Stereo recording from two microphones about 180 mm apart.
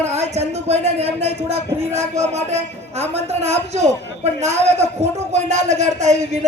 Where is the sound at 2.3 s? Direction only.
35° right (ahead or behind).